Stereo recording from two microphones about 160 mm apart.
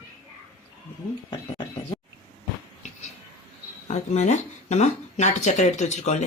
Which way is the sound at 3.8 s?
45° left (ahead or behind).